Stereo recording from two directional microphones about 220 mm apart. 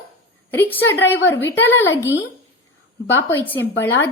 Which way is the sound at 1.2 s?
55° left (ahead or behind).